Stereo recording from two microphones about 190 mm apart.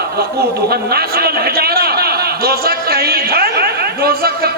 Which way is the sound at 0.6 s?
55° right (ahead or behind).